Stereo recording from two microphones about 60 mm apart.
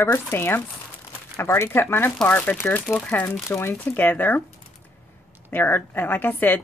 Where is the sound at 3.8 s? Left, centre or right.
Left.